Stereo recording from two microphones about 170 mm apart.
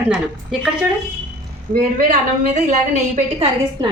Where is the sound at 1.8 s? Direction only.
50° right (ahead or behind).